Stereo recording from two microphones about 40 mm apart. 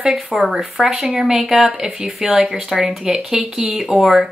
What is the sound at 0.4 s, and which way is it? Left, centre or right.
Speech, centre.